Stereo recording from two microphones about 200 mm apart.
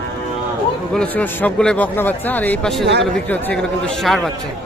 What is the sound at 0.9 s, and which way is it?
A man's voice, 5° left (ahead or behind).